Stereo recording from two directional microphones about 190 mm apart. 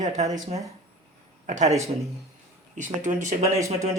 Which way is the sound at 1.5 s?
35° right (ahead or behind).